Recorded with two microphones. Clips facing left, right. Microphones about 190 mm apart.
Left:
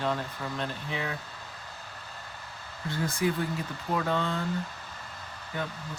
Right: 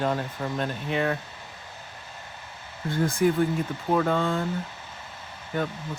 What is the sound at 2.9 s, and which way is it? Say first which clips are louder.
Speech: right 6 dB; 50° right (ahead or behind).